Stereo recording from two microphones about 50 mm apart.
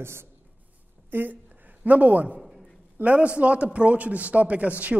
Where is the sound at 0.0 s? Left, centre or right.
Right.